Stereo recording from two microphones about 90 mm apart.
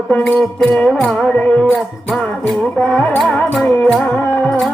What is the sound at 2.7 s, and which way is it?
Music, 10° left (ahead or behind).